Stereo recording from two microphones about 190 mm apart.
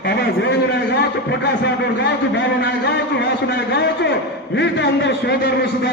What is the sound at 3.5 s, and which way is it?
A man's voice, 60° left (ahead or behind).